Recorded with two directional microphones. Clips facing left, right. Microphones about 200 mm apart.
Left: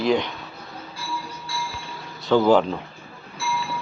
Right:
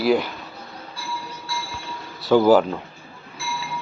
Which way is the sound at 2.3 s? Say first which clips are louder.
Right 2 dB; 5° right (ahead or behind).